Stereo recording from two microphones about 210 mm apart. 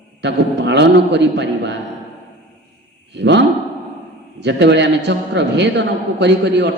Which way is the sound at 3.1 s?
55° right (ahead or behind).